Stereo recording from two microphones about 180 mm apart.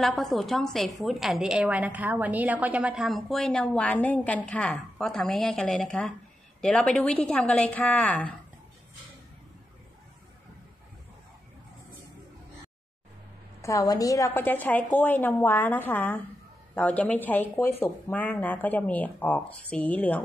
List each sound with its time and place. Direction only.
0.0 s a woman's voice: centre (ahead or behind)
13.6 s speech: 20° left (ahead or behind)